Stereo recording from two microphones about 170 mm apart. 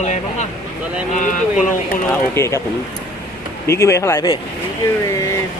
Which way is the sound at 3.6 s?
15° left (ahead or behind).